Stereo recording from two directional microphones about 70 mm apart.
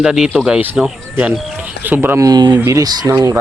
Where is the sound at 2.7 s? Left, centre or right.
Right.